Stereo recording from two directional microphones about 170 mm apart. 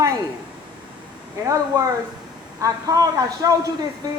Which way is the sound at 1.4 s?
20° right (ahead or behind).